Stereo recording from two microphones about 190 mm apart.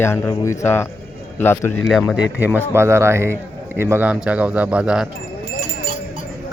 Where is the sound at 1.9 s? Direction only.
Centre (ahead or behind).